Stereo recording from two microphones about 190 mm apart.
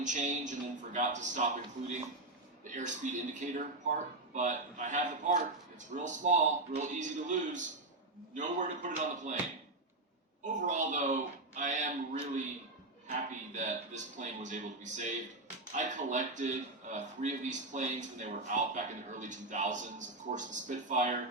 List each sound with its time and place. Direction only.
0.0 s a man's voice: 40° right (ahead or behind)
2.6 s a man's voice: 40° right (ahead or behind)
10.4 s a man's voice: 40° right (ahead or behind)